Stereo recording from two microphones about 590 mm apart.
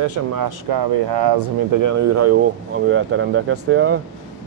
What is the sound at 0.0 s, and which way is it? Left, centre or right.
Speech, right.